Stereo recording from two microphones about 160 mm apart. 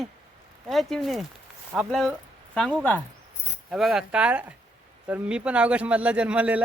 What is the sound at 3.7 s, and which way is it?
A man's voice, 5° right (ahead or behind).